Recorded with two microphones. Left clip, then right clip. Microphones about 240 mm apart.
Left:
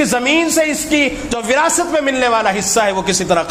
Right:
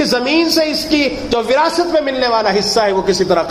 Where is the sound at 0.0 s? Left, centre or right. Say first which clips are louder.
Even; left.